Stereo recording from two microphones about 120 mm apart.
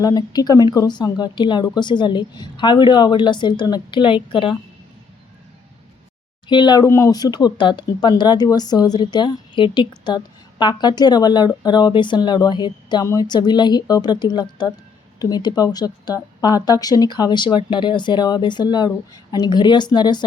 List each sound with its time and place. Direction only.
0.0 s speech: 30° left (ahead or behind)
6.5 s speech: 40° left (ahead or behind)
6.8 s speech: 25° left (ahead or behind)